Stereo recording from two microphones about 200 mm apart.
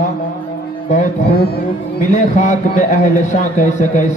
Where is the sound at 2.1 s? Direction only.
35° left (ahead or behind).